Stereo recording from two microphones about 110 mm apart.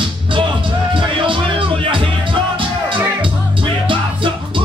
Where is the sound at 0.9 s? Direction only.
50° right (ahead or behind).